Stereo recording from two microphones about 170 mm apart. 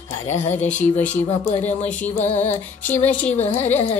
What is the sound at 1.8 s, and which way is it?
Music, 10° left (ahead or behind).